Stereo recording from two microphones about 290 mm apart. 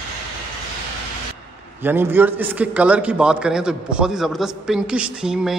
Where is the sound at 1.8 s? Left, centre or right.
Centre.